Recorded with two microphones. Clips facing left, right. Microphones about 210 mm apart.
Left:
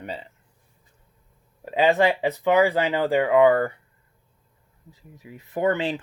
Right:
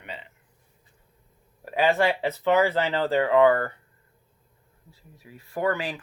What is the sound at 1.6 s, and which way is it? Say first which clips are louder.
Speech: left 3 dB; 20° left (ahead or behind).